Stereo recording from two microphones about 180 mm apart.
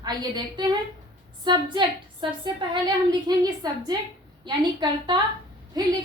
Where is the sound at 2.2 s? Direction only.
25° right (ahead or behind).